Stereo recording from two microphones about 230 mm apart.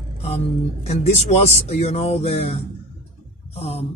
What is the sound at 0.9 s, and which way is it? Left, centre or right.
Speech, left.